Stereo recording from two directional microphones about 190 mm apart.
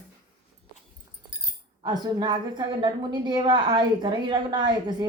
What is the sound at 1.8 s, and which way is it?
A woman's voice, 20° right (ahead or behind).